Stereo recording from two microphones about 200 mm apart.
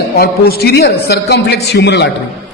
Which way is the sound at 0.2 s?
50° left (ahead or behind).